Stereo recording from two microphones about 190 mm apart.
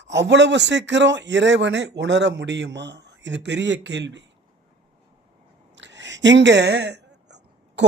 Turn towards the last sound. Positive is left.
turn(degrees=-65)  # may be behind; listen again after turning